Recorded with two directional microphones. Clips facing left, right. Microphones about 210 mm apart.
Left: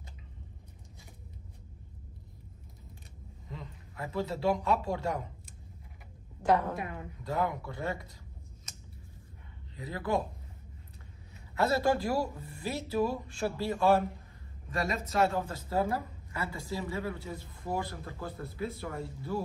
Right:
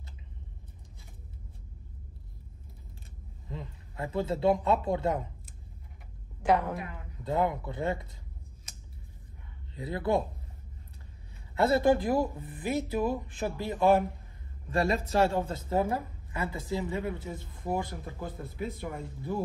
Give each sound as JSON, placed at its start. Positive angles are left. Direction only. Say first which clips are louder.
{"t": 3.9, "sound": "speech", "louder": "right 3 dB", "side_deg": -25}
{"t": 7.2, "sound": "speech", "louder": "right 4 dB", "side_deg": -25}
{"t": 9.8, "sound": "speech", "louder": "right 5 dB", "side_deg": -25}
{"t": 11.5, "sound": "speech", "louder": "right 4 dB", "side_deg": -25}
{"t": 14.7, "sound": "speech", "louder": "right 5 dB", "side_deg": -30}